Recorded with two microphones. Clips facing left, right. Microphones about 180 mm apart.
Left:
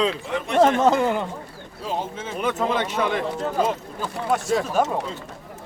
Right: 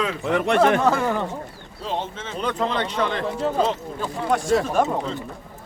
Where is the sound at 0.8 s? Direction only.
20° left (ahead or behind).